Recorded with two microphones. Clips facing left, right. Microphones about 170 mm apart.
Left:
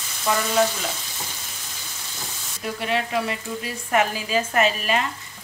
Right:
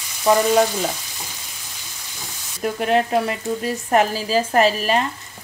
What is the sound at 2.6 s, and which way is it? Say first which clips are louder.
Frying: right 7 dB; 45° right (ahead or behind).